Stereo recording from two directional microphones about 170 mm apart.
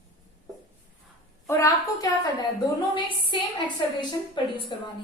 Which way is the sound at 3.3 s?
25° left (ahead or behind).